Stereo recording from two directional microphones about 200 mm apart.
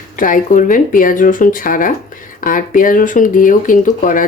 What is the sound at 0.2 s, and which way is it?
Speech, 40° left (ahead or behind).